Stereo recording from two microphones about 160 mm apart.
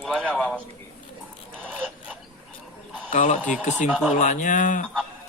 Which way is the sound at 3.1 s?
45° left (ahead or behind).